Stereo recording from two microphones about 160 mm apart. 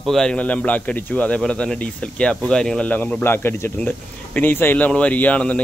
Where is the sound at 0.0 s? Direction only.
5° left (ahead or behind).